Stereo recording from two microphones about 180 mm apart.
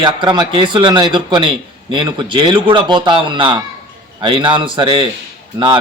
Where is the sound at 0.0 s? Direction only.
25° right (ahead or behind).